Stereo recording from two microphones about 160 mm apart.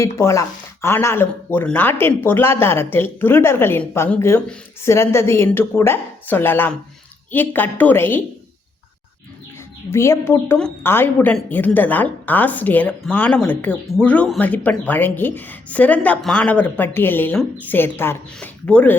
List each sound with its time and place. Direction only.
0.0 s a woman's voice: 20° left (ahead or behind)
9.9 s a woman's voice: 15° left (ahead or behind)